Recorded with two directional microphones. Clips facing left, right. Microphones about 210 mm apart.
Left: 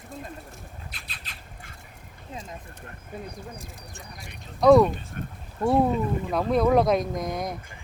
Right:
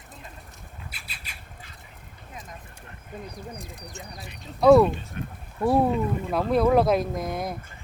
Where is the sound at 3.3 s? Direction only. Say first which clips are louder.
Right 1 dB; centre (ahead or behind).